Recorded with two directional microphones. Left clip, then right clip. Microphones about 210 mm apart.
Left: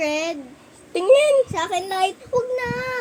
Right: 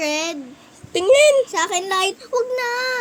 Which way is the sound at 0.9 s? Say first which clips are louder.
Right 2 dB; 10° right (ahead or behind).